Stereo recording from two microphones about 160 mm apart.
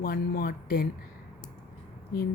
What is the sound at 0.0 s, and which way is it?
Speech, 65° left (ahead or behind).